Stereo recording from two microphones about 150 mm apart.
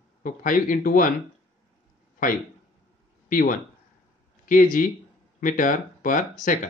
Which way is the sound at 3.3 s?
65° left (ahead or behind).